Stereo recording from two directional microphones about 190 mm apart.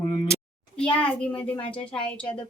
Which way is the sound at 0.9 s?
5° left (ahead or behind).